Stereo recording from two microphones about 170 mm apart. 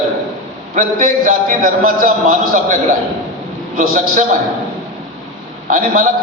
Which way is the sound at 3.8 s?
50° right (ahead or behind).